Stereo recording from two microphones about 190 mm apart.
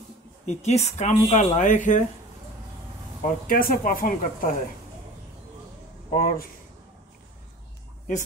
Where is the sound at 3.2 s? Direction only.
50° left (ahead or behind).